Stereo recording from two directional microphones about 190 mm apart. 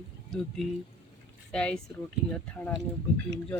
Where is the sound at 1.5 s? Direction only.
5° left (ahead or behind).